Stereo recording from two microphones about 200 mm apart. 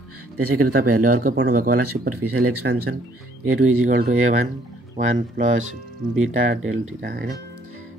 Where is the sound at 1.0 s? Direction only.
45° right (ahead or behind).